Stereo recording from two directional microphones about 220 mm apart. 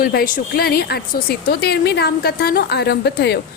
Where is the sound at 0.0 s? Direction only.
40° left (ahead or behind).